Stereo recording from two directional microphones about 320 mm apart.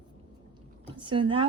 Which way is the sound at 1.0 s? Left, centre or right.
Centre.